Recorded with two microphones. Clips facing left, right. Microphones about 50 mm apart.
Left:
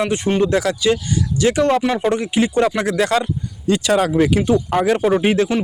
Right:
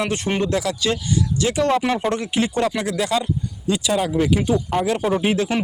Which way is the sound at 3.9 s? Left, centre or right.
Left.